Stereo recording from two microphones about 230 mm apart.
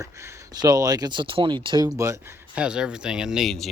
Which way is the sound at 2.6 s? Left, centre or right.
Centre.